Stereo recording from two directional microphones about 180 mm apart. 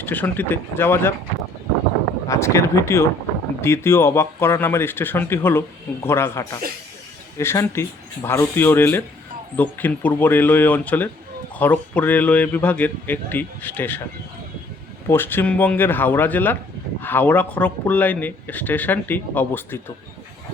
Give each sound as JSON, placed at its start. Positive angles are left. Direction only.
{"t": 0.0, "sound": "speech", "side_deg": 10}
{"t": 2.2, "sound": "speech", "side_deg": 15}
{"t": 15.0, "sound": "speech", "side_deg": 10}